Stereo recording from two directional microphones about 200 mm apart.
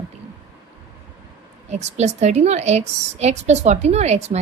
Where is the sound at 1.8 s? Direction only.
35° right (ahead or behind).